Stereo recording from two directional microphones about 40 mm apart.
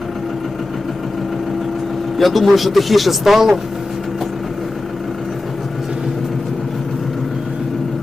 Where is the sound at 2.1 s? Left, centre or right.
Centre.